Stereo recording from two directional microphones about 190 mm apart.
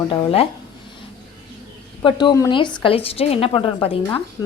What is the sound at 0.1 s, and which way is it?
Speech, 30° left (ahead or behind).